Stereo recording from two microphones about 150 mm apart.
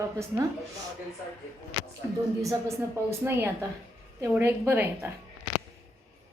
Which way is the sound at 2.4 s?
20° right (ahead or behind).